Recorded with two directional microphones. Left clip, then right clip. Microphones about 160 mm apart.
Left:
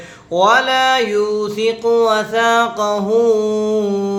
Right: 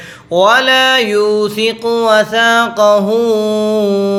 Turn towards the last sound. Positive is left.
turn(degrees=-25)  # may be behind; listen again after turning